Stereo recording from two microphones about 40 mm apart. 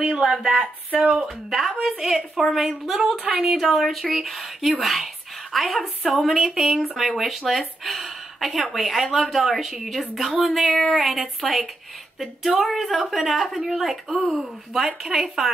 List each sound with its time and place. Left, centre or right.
0.5 s speech: right
1.2 s speech: centre
1.7 s a woman's voice: right
2.0 s a woman's voice: centre